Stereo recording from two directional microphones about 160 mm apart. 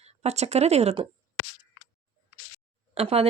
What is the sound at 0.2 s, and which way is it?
Speech, 40° right (ahead or behind).